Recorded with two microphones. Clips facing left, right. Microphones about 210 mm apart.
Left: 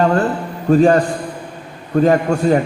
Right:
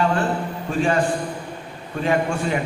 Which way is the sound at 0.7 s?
40° left (ahead or behind).